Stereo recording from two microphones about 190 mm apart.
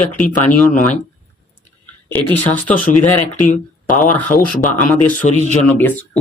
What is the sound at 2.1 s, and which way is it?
Speech, 10° left (ahead or behind).